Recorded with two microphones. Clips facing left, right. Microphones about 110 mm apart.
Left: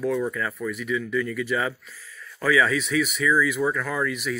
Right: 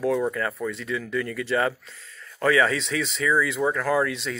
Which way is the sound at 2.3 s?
60° right (ahead or behind).